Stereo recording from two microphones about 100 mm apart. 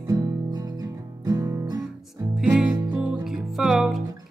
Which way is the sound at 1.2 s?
40° right (ahead or behind).